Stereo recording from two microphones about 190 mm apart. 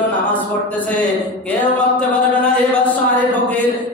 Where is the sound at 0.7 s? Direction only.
5° left (ahead or behind).